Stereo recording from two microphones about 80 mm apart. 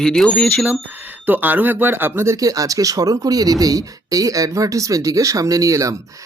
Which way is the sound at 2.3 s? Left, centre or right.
Right.